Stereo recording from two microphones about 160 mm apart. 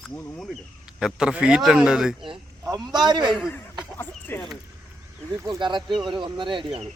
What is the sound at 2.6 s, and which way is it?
Speech, 25° right (ahead or behind).